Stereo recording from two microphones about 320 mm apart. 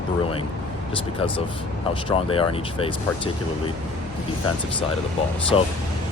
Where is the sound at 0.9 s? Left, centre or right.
Centre.